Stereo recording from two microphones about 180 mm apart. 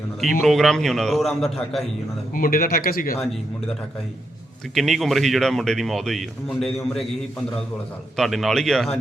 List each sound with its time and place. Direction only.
0.4 s speech: centre (ahead or behind)
2.3 s speech: 50° left (ahead or behind)
4.7 s speech: centre (ahead or behind)
8.1 s speech: centre (ahead or behind)